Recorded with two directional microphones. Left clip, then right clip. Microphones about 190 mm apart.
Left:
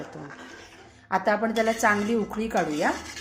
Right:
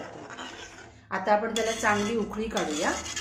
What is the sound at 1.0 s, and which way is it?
A woman's voice, 45° left (ahead or behind).